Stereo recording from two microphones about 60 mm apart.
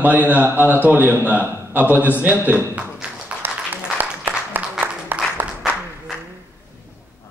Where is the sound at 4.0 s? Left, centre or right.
Right.